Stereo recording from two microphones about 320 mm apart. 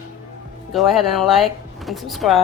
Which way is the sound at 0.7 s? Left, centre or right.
Centre.